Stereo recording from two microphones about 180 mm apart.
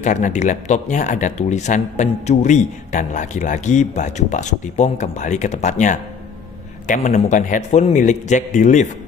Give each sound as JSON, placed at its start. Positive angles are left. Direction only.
{"t": 0.0, "sound": "a man's voice", "side_deg": 40}